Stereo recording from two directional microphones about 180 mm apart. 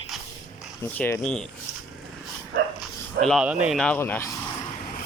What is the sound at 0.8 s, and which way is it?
Speech, 10° left (ahead or behind).